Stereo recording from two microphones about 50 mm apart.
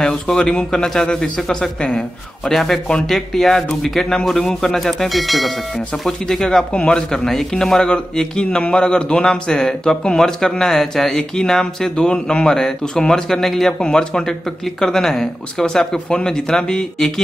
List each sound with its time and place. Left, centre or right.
0.0 s speech: centre